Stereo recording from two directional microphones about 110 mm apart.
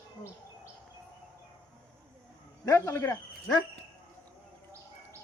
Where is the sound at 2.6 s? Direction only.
25° left (ahead or behind).